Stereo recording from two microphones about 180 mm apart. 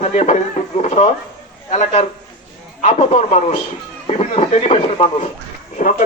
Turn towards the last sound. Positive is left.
turn(degrees=50)  # may be behind; listen again after turning